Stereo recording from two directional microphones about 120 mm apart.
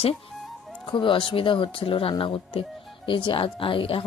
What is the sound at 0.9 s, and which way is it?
Speech, 45° left (ahead or behind).